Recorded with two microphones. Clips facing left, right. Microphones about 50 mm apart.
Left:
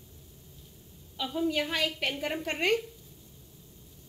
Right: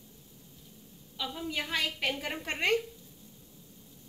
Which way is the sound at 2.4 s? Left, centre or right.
Right.